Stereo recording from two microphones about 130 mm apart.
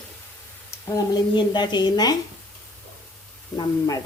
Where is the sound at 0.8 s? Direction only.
30° left (ahead or behind).